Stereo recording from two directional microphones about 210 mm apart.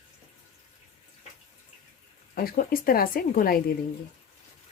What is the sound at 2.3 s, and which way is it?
Speech, 45° left (ahead or behind).